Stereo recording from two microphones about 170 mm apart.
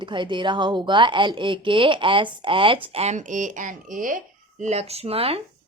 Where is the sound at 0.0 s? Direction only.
30° right (ahead or behind).